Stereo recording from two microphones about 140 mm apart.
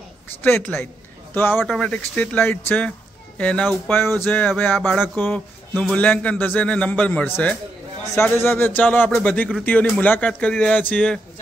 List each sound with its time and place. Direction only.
0.4 s a man's voice: 10° left (ahead or behind)
1.6 s a man's voice: 5° left (ahead or behind)
4.7 s a sound: centre (ahead or behind)
5.0 s a man's voice: 15° left (ahead or behind)